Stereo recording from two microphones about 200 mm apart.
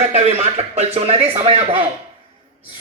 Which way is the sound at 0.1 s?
30° right (ahead or behind).